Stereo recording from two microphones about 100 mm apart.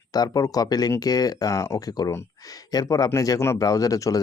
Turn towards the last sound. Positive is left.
turn(degrees=35)  # may be behind; listen again after turning